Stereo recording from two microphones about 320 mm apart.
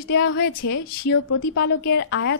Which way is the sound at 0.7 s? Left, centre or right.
Left.